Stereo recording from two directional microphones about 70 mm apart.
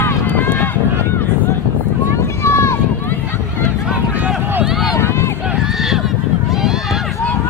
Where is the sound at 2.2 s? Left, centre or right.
Left.